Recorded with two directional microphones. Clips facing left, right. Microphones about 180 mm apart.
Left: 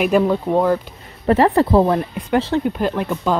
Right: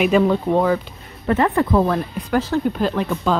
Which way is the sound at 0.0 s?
5° left (ahead or behind).